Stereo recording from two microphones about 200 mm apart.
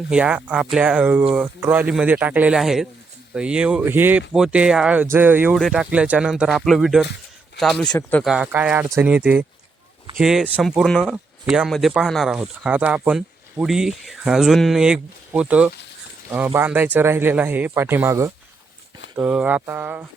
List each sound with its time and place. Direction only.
0.1 s speech: 5° right (ahead or behind)